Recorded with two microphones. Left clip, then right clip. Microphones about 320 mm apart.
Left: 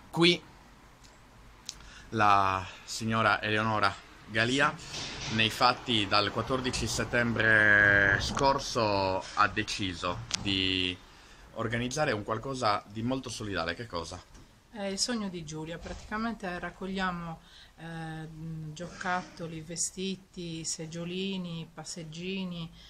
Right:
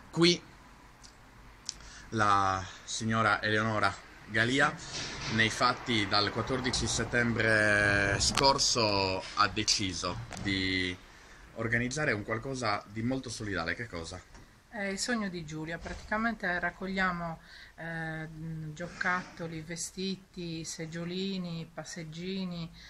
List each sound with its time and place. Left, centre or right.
0.1 s speech: centre
1.7 s speech: centre
20.5 s speech: centre
21.2 s speech: centre